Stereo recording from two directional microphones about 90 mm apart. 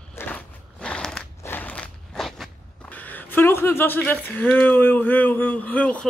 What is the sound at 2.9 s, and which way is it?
Speech, 20° left (ahead or behind).